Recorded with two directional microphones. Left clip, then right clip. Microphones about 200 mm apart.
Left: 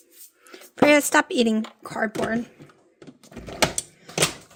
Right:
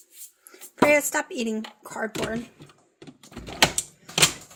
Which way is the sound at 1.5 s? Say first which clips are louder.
Left 5 dB; 55° left (ahead or behind).